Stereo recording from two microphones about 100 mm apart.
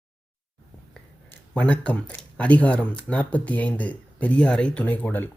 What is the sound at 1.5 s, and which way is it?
Speech, 15° left (ahead or behind).